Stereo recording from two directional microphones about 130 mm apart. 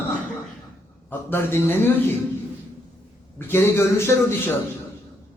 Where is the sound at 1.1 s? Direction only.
15° left (ahead or behind).